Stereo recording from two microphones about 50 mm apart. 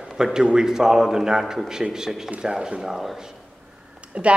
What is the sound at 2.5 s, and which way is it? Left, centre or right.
Speech, centre.